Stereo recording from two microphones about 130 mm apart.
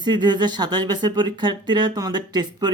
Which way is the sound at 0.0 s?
35° right (ahead or behind).